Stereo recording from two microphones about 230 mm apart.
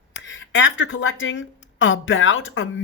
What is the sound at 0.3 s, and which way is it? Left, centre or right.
A woman's voice, left.